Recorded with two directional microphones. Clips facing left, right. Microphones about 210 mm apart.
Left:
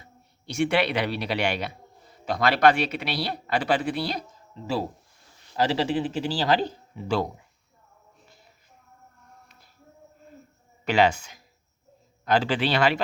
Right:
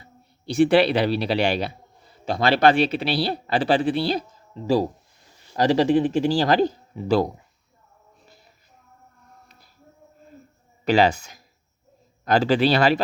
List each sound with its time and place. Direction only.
0.0 s speech: 35° right (ahead or behind)
4.6 s speech: 40° right (ahead or behind)
10.8 s speech: 35° right (ahead or behind)